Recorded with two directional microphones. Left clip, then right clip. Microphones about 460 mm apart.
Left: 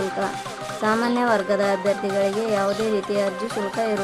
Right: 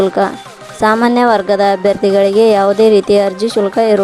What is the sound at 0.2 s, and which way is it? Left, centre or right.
Speech, centre.